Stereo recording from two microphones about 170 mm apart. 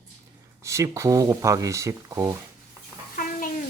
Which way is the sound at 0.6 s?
15° right (ahead or behind).